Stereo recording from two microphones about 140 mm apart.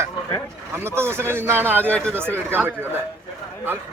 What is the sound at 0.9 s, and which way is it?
Speech, 15° right (ahead or behind).